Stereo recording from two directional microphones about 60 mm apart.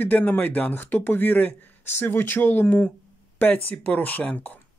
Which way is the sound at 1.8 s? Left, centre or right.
Left.